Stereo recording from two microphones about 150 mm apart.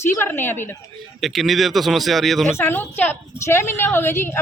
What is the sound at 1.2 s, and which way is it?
Speech, centre (ahead or behind).